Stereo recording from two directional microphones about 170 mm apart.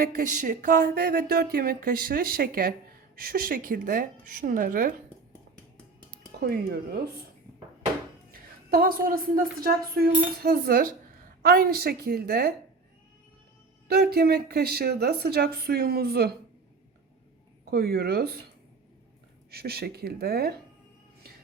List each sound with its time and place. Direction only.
0.0 s a woman's voice: 55° right (ahead or behind)
6.4 s speech: 65° right (ahead or behind)
8.3 s speech: 60° right (ahead or behind)
13.8 s speech: 65° right (ahead or behind)
17.7 s speech: 65° right (ahead or behind)
19.5 s speech: 65° right (ahead or behind)